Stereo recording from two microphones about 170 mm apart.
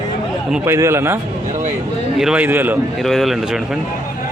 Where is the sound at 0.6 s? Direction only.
15° right (ahead or behind).